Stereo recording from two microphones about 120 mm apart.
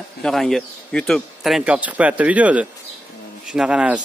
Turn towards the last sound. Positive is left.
turn(degrees=-10)  # may be behind; listen again after turning